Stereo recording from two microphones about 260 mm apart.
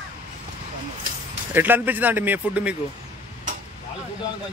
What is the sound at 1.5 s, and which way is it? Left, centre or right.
Speech, centre.